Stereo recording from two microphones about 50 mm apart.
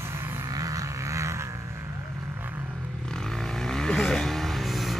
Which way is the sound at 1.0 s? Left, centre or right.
Right.